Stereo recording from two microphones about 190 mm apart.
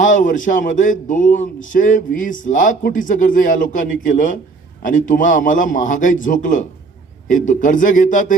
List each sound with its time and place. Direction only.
0.0 s a man's voice: 40° left (ahead or behind)